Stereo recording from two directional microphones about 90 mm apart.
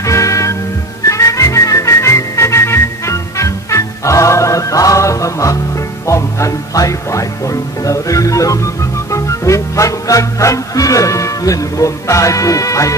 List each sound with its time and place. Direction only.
0.0 s music: 35° left (ahead or behind)
6.0 s speech: 35° left (ahead or behind)
9.1 s music: 35° left (ahead or behind)